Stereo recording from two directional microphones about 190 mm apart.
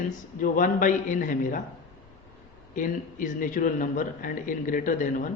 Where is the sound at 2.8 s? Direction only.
45° left (ahead or behind).